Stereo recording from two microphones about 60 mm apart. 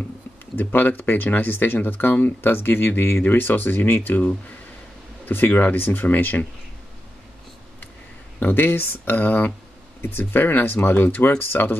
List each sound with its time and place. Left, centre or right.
0.6 s speech: left
8.4 s speech: left